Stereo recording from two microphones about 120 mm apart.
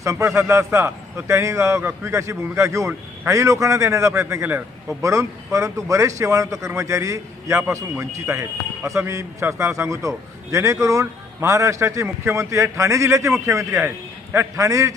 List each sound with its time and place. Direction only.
0.0 s a man's voice: 25° right (ahead or behind)